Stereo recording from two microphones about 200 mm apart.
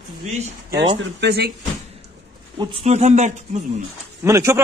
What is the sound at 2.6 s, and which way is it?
Speech, 30° right (ahead or behind).